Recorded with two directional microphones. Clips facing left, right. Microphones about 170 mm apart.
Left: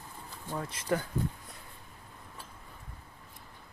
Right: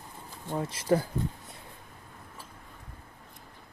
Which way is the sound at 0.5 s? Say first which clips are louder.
Right 5 dB; 30° right (ahead or behind).